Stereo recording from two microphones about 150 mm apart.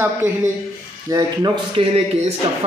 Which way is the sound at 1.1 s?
25° right (ahead or behind).